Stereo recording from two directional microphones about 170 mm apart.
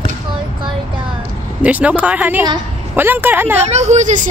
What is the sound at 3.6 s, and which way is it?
Speech, 40° right (ahead or behind).